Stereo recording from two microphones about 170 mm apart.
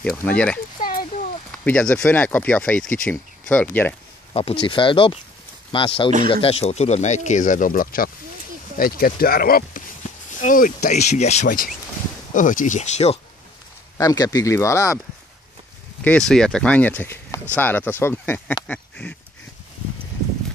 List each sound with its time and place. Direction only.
0.0 s speech: 5° left (ahead or behind)
0.7 s oink: 55° left (ahead or behind)
1.6 s speech: 5° left (ahead or behind)
4.3 s speech: 35° left (ahead or behind)
13.9 s speech: 20° left (ahead or behind)
16.0 s speech: 5° left (ahead or behind)
18.7 s duck: 10° left (ahead or behind)